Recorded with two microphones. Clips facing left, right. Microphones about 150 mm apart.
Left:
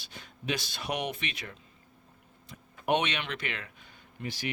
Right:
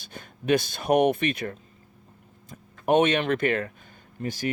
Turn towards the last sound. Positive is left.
turn(degrees=-45)  # may be behind; listen again after turning